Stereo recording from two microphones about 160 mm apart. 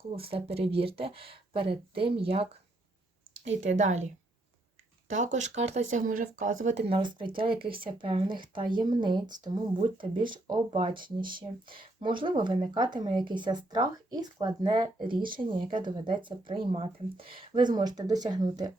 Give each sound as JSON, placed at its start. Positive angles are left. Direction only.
{"t": 0.2, "sound": "speech", "side_deg": -35}
{"t": 6.8, "sound": "speech", "side_deg": -30}